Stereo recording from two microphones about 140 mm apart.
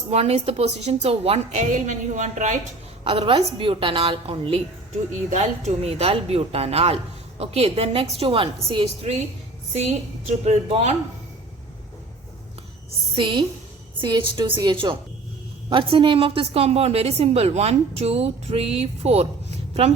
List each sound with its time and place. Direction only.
0.1 s a woman's voice: 50° right (ahead or behind)
1.7 s a woman's voice: 60° right (ahead or behind)
3.0 s a woman's voice: 40° right (ahead or behind)
5.3 s a woman's voice: 55° right (ahead or behind)
10.4 s a woman's voice: 50° right (ahead or behind)
13.1 s a woman's voice: 35° right (ahead or behind)